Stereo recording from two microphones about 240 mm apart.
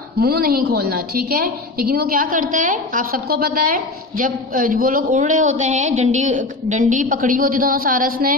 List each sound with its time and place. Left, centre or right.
0.2 s a woman's voice: right